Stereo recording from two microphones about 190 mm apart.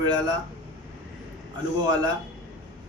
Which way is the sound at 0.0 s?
20° right (ahead or behind).